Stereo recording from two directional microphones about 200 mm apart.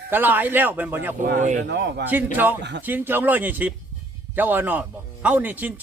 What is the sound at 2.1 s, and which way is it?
Speech, 10° right (ahead or behind).